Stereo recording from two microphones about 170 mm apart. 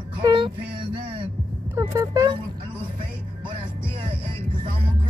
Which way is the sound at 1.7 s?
20° right (ahead or behind).